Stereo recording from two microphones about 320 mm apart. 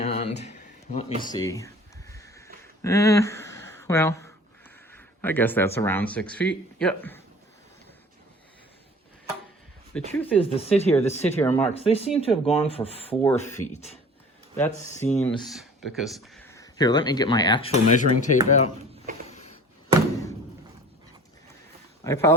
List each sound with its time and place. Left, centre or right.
0.0 s a sound: centre
2.8 s speech: centre
10.1 s speech: centre
10.3 s speech: centre
11.3 s speech: centre
11.7 s speech: centre
13.2 s speech: centre
14.8 s speech: centre
19.3 s a sound: left
22.0 s speech: centre